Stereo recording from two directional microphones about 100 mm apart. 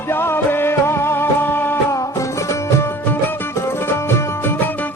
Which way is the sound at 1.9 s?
30° left (ahead or behind).